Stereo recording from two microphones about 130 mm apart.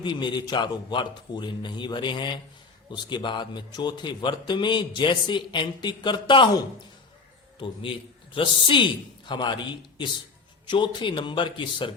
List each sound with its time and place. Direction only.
0.0 s a man's voice: 35° left (ahead or behind)
7.6 s a man's voice: 40° left (ahead or behind)